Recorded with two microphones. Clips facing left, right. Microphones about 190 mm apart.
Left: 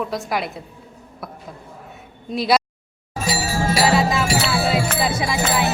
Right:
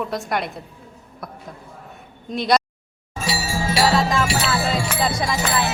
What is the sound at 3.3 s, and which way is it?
Music, 45° left (ahead or behind).